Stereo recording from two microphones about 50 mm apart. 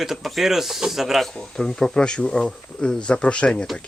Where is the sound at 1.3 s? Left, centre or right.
Centre.